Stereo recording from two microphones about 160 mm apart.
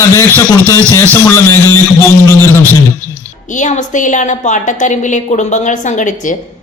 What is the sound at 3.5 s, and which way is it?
A woman's voice, 50° left (ahead or behind).